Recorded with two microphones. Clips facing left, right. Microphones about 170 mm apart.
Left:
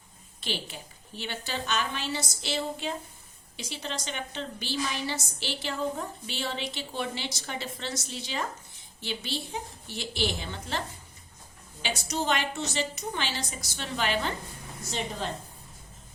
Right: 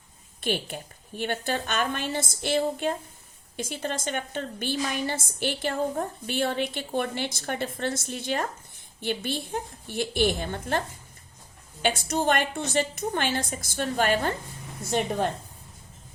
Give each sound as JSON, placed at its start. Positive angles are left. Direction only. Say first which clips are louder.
{"t": 0.4, "sound": "a woman's voice", "louder": "right 6 dB", "side_deg": -50}